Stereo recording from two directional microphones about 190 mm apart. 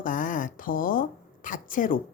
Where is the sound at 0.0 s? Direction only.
45° left (ahead or behind).